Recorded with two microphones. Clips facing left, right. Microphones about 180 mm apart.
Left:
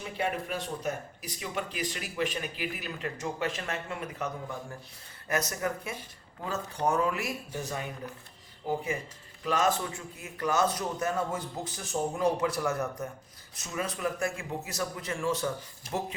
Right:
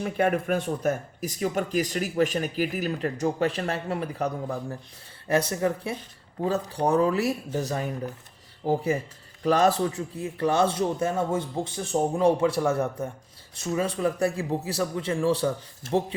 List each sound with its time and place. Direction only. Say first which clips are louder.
0.0 s a man's voice: right 8 dB; 55° right (ahead or behind); by 16.1 s 30° right (ahead or behind)